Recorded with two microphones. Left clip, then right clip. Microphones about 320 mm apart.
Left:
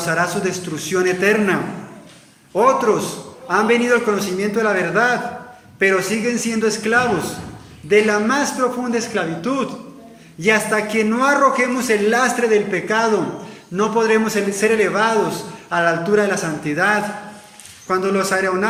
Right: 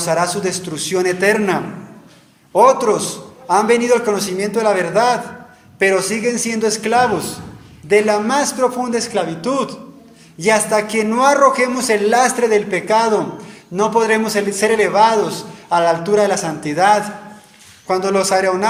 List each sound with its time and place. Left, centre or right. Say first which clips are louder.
0.0 s a man's voice: right 2 dB; centre
2.6 s a man's voice: right 3 dB; centre